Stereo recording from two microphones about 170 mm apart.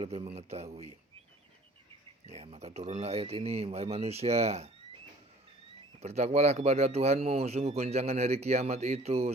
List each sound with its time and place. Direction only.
0.0 s speech: 35° right (ahead or behind)
2.2 s speech: 40° right (ahead or behind)
6.0 s speech: 40° right (ahead or behind)